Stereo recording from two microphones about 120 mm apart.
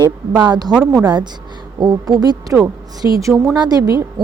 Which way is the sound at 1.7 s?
35° right (ahead or behind).